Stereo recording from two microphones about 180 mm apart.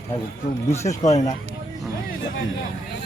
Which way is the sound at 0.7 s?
15° left (ahead or behind).